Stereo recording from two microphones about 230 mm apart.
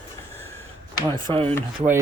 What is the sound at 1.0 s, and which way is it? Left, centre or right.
Speech, right.